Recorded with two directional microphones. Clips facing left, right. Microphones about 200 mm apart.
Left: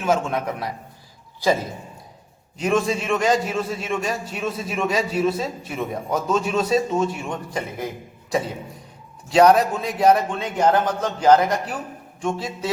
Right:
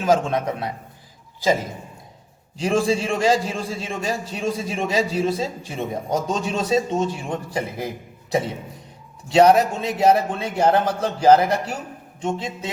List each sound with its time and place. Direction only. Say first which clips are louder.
0.0 s a man's voice: right 2 dB; 30° right (ahead or behind)
2.6 s a man's voice: right 1 dB; 30° right (ahead or behind)
9.3 s a man's voice: even; 25° right (ahead or behind)